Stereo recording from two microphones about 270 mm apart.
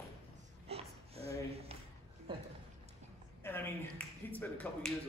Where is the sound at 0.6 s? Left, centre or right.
Right.